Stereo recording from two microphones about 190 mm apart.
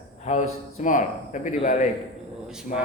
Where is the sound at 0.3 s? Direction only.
40° left (ahead or behind).